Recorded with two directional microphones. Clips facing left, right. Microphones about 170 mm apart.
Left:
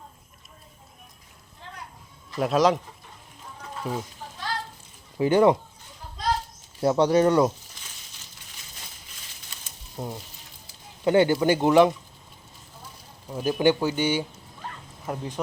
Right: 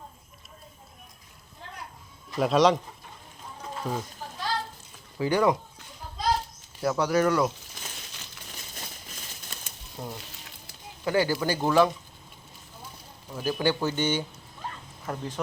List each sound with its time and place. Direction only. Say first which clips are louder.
2.4 s speech: even; centre (ahead or behind)
3.9 s speech: left 1 dB; 5° left (ahead or behind)
5.1 s speech: left 5 dB; 20° left (ahead or behind)
6.8 s speech: left 4 dB; 30° left (ahead or behind)
10.0 s speech: left 4 dB; 10° left (ahead or behind)
11.0 s speech: left 6 dB; 25° left (ahead or behind)
13.3 s speech: left 5 dB; 20° left (ahead or behind)